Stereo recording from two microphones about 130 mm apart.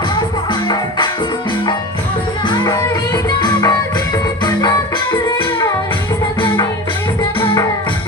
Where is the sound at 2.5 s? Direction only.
35° left (ahead or behind).